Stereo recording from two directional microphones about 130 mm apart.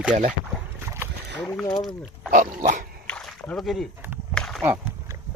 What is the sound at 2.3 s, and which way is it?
Dog, 90° right.